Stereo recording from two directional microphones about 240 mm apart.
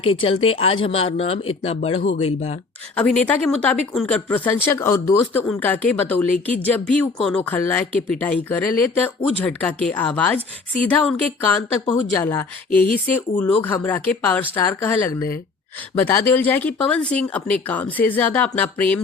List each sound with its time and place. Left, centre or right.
0.0 s speech: left
2.9 s speech: centre